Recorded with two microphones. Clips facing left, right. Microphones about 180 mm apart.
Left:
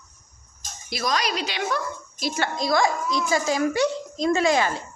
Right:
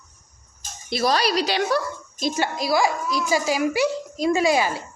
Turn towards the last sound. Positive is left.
turn(degrees=-10)  # may be behind; listen again after turning